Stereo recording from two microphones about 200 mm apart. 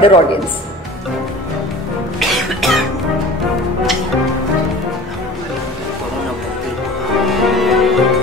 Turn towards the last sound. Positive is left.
turn(degrees=0)  # may be behind; listen again after turning